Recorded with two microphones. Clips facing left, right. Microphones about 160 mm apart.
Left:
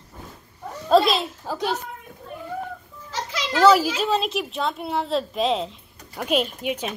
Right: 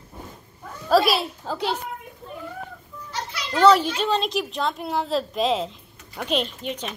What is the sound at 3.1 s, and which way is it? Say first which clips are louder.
Children playing: left 3 dB; 90° left.